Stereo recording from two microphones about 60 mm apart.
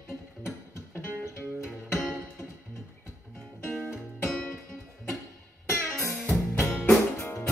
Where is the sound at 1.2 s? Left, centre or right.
Left.